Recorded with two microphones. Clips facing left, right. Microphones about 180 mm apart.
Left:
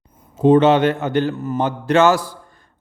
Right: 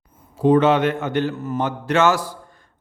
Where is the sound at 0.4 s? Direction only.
25° left (ahead or behind).